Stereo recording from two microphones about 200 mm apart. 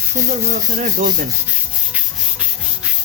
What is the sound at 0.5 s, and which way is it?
Speech, 40° right (ahead or behind).